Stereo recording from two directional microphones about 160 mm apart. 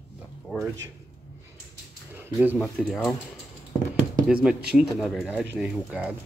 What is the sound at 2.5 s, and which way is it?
Speech, centre (ahead or behind).